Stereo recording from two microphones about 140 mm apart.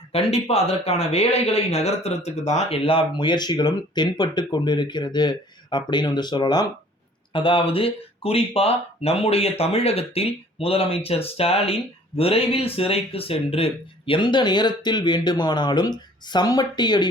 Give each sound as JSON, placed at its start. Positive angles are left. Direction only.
{"t": 0.1, "sound": "speech", "side_deg": 45}